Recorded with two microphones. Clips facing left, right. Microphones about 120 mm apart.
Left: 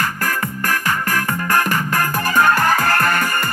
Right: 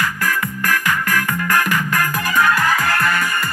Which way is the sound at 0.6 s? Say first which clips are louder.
Right 1 dB; 35° left (ahead or behind).